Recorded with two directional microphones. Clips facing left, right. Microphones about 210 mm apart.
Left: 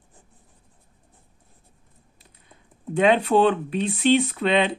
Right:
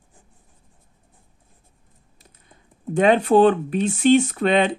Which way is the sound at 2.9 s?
45° right (ahead or behind).